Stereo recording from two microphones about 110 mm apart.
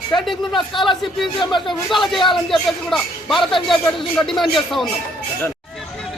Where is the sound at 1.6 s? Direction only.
Centre (ahead or behind).